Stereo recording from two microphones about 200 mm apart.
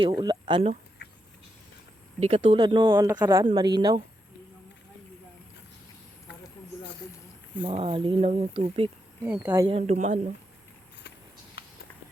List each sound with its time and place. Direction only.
0.1 s speech: 20° right (ahead or behind)
2.2 s speech: 30° right (ahead or behind)
7.6 s speech: 25° right (ahead or behind)
9.2 s speech: 10° right (ahead or behind)
9.6 s speech: 30° right (ahead or behind)